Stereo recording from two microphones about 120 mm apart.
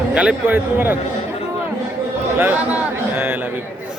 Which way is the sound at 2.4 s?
15° right (ahead or behind).